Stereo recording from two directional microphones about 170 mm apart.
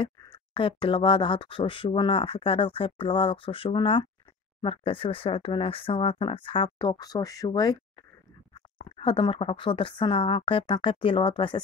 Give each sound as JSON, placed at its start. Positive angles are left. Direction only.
{"t": 0.6, "sound": "speech", "side_deg": 30}
{"t": 8.8, "sound": "speech", "side_deg": 30}